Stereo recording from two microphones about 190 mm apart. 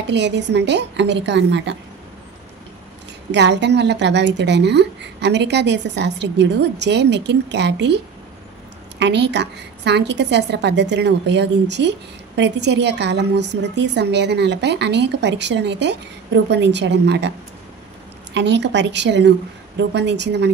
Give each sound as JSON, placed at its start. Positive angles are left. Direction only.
{"t": 0.1, "sound": "a woman's voice", "side_deg": -65}
{"t": 3.3, "sound": "a woman's voice", "side_deg": -65}
{"t": 9.0, "sound": "a woman's voice", "side_deg": -65}
{"t": 18.3, "sound": "a woman's voice", "side_deg": -65}